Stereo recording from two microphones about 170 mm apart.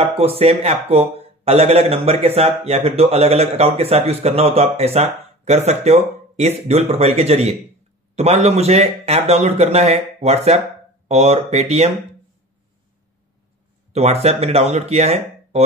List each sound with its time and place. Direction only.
0.0 s a man's voice: 35° right (ahead or behind)
13.9 s a man's voice: 40° right (ahead or behind)